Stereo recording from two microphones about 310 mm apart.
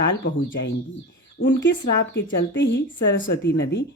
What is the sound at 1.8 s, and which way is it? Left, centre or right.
Speech, left.